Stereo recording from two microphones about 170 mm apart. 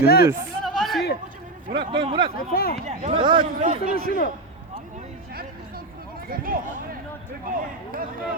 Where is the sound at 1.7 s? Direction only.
30° right (ahead or behind).